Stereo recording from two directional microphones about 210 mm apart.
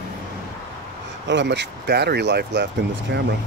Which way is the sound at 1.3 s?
55° right (ahead or behind).